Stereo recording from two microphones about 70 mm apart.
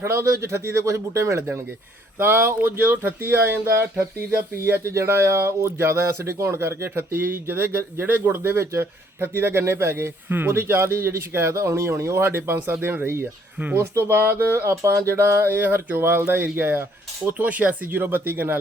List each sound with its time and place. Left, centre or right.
0.0 s speech: right
2.1 s speech: right